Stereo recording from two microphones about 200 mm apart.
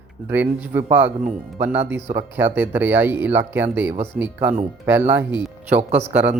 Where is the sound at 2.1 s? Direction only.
10° right (ahead or behind).